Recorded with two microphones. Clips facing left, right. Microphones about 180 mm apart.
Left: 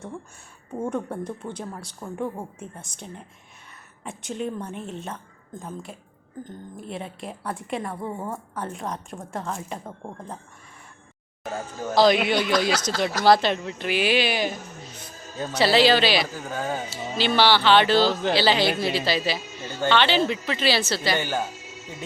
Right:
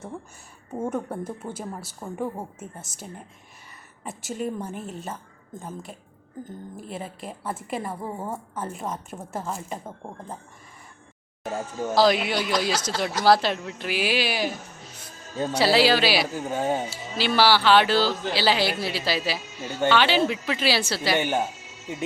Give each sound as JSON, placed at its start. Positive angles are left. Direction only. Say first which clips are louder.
{"t": 0.7, "sound": "a woman's voice", "louder": "even", "side_deg": -5}
{"t": 11.9, "sound": "a woman's voice", "louder": "left 2 dB", "side_deg": -5}
{"t": 15.5, "sound": "speech", "louder": "left 1 dB", "side_deg": -5}
{"t": 16.3, "sound": "speech", "louder": "right 4 dB", "side_deg": -25}
{"t": 16.9, "sound": "a woman's voice", "louder": "left 1 dB", "side_deg": -5}